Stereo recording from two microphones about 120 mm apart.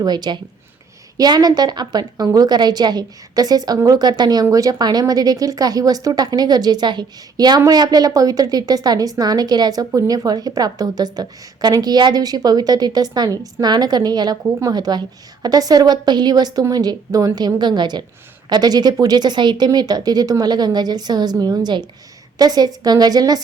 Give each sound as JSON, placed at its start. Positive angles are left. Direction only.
{"t": 0.0, "sound": "a woman's voice", "side_deg": -35}